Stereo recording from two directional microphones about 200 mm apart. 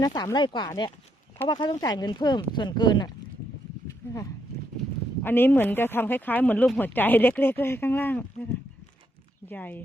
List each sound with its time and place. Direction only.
0.0 s speech: 20° left (ahead or behind)
3.8 s a sound: 15° left (ahead or behind)
5.2 s speech: 10° left (ahead or behind)
9.5 s speech: 10° left (ahead or behind)